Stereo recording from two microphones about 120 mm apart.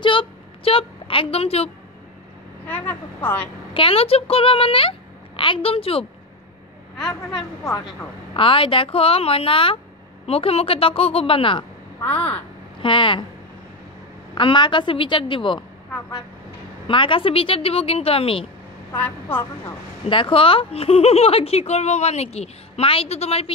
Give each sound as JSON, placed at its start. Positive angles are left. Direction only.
{"t": 0.0, "sound": "a woman's voice", "side_deg": 45}
{"t": 2.6, "sound": "a woman's voice", "side_deg": 15}
{"t": 3.7, "sound": "a child's voice", "side_deg": 50}
{"t": 8.4, "sound": "a child's voice", "side_deg": 50}
{"t": 12.0, "sound": "a woman's voice", "side_deg": 15}
{"t": 12.8, "sound": "a child's voice", "side_deg": 45}
{"t": 14.3, "sound": "a child's voice", "side_deg": 40}
{"t": 16.8, "sound": "a child's voice", "side_deg": 45}
{"t": 20.1, "sound": "speech", "side_deg": 45}